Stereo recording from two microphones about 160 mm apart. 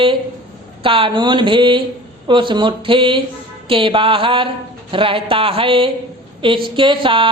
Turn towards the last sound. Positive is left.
turn(degrees=-35)  # may be behind; listen again after turning